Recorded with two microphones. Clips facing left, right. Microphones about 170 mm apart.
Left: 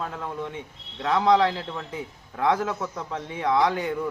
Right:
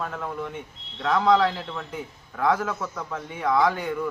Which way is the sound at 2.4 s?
25° left (ahead or behind).